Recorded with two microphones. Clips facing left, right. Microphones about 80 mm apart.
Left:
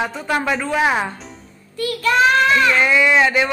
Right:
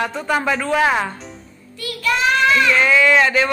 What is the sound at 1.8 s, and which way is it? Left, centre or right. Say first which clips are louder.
Child singing: left 4 dB; left.